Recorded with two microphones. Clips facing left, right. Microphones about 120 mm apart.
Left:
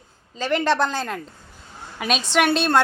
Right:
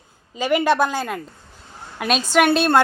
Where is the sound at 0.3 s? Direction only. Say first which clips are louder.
Right 3 dB; 10° right (ahead or behind).